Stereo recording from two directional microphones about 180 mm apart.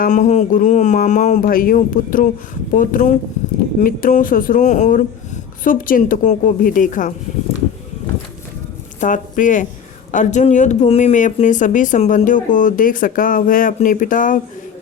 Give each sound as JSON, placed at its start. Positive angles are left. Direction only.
{"t": 0.0, "sound": "speech", "side_deg": 45}
{"t": 9.0, "sound": "speech", "side_deg": 45}